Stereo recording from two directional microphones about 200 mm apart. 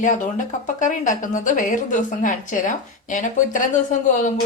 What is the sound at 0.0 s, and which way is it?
A woman's voice, 40° left (ahead or behind).